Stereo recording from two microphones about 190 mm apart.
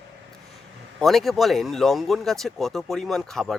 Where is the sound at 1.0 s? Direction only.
Centre (ahead or behind).